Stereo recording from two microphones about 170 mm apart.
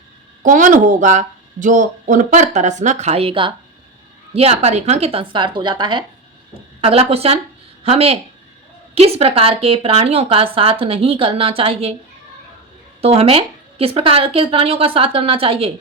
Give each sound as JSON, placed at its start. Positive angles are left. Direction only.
{"t": 0.4, "sound": "a woman's voice", "side_deg": -50}
{"t": 13.0, "sound": "a woman's voice", "side_deg": -35}